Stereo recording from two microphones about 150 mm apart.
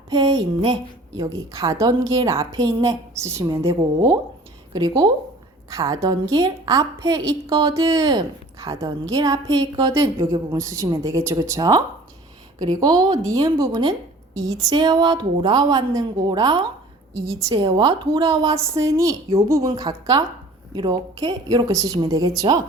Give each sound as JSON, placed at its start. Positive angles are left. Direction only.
{"t": 0.1, "sound": "music", "side_deg": -25}
{"t": 1.1, "sound": "a woman's voice", "side_deg": -20}
{"t": 18.5, "sound": "a woman's voice", "side_deg": -20}